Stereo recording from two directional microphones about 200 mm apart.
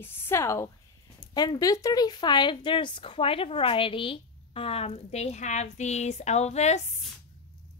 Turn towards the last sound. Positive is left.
turn(degrees=35)  # may be behind; listen again after turning